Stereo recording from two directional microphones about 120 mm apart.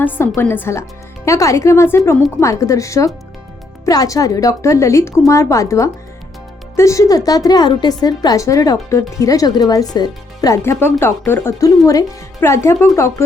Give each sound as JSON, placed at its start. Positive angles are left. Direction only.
{"t": 0.3, "sound": "speech", "side_deg": 20}
{"t": 10.6, "sound": "speech", "side_deg": 20}